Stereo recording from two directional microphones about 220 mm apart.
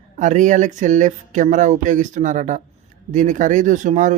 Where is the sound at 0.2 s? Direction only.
35° right (ahead or behind).